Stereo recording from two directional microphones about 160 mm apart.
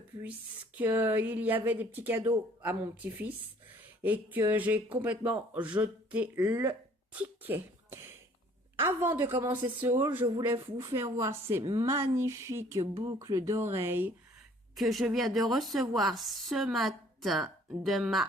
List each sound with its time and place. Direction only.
0.8 s speech: 10° right (ahead or behind)
14.8 s a woman's voice: centre (ahead or behind)